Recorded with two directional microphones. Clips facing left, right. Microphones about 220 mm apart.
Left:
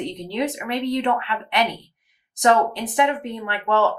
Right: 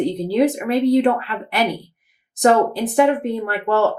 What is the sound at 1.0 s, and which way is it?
Speech, 35° right (ahead or behind).